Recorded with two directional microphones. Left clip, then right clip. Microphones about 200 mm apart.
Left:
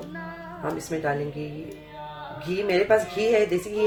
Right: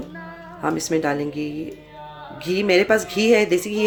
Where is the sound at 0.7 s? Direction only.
50° right (ahead or behind).